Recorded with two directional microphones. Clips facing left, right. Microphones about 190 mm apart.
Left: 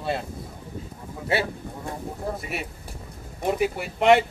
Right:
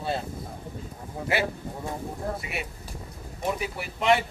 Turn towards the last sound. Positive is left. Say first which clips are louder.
# left 5 dB
turn(degrees=60)  # may be behind; listen again after turning